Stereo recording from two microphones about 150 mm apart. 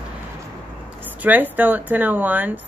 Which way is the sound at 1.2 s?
10° right (ahead or behind).